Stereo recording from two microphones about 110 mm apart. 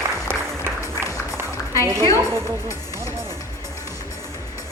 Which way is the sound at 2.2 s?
25° right (ahead or behind).